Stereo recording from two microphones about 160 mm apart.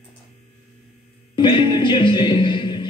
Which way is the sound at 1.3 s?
30° left (ahead or behind).